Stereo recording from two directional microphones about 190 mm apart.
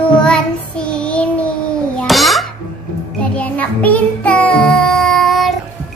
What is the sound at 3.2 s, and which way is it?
Child singing, 5° left (ahead or behind).